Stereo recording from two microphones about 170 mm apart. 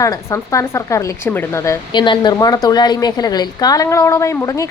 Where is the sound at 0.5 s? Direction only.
20° left (ahead or behind).